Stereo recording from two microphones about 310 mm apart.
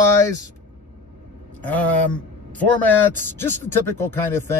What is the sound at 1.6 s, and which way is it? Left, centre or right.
Speech, centre.